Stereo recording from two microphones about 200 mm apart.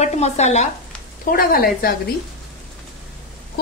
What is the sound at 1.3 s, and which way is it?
Speech, 45° left (ahead or behind).